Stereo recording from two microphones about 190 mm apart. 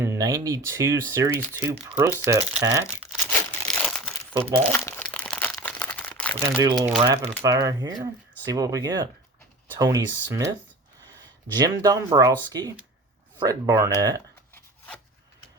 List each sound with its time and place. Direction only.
0.0 s speech: 15° right (ahead or behind)
2.8 s crumpling: 5° left (ahead or behind)
4.6 s speech: 5° left (ahead or behind)
5.0 s crumpling: 5° left (ahead or behind)
6.9 s speech: 20° right (ahead or behind)
11.5 s speech: 20° right (ahead or behind)
14.5 s rub: 5° left (ahead or behind)